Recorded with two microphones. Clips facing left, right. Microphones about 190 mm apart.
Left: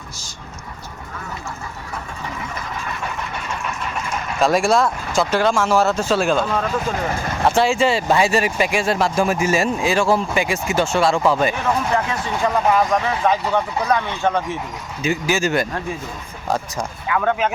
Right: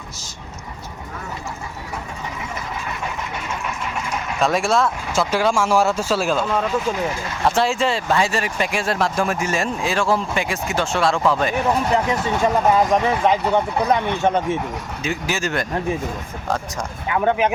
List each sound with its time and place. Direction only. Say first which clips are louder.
4.4 s speech: left 2 dB; centre (ahead or behind)
8.0 s speech: left 3 dB; 10° left (ahead or behind)
11.5 s speech: right 1 dB; 20° right (ahead or behind)
15.0 s speech: left 5 dB; centre (ahead or behind)
17.1 s speech: right 1 dB; 20° right (ahead or behind)